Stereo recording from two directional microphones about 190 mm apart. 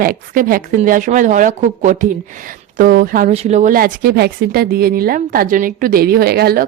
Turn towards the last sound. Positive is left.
turn(degrees=-55)  # may be behind; listen again after turning